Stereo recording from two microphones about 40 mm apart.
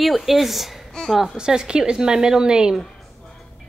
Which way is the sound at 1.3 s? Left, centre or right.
Centre.